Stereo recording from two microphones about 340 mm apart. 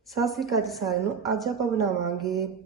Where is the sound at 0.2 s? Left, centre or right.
Centre.